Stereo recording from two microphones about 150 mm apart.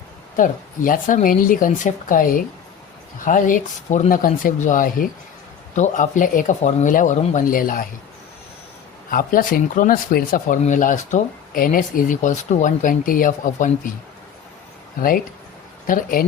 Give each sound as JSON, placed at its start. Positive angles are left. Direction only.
{"t": 0.3, "sound": "speech", "side_deg": 65}
{"t": 9.0, "sound": "speech", "side_deg": 65}
{"t": 15.0, "sound": "speech", "side_deg": 70}